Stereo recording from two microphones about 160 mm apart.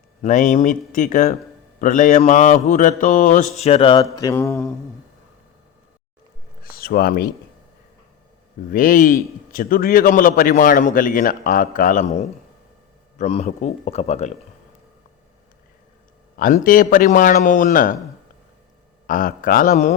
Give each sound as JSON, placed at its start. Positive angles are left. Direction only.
{"t": 0.2, "sound": "a man's voice", "side_deg": 50}
{"t": 3.6, "sound": "speech", "side_deg": 40}
{"t": 4.1, "sound": "mantra", "side_deg": 20}
{"t": 6.7, "sound": "speech", "side_deg": 65}
{"t": 8.7, "sound": "a man's voice", "side_deg": 60}
{"t": 13.1, "sound": "a man's voice", "side_deg": 45}
{"t": 16.6, "sound": "a man's voice", "side_deg": 60}
{"t": 19.0, "sound": "a man's voice", "side_deg": 55}